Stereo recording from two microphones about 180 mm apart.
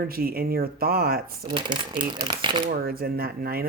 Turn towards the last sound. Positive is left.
turn(degrees=-55)  # may be behind; listen again after turning